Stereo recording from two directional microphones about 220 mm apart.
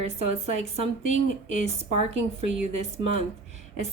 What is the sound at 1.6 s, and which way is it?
Speech, 30° right (ahead or behind).